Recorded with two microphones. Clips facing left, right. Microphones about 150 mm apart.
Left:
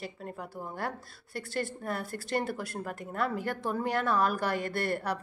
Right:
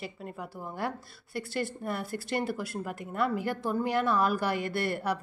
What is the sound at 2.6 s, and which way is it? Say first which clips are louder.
Speech: right 2 dB; 5° right (ahead or behind).